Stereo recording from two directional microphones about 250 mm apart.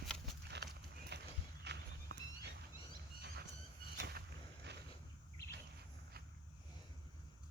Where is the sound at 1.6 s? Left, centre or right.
Right.